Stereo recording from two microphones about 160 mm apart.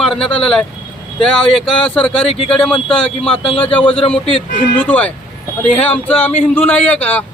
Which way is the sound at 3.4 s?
35° left (ahead or behind).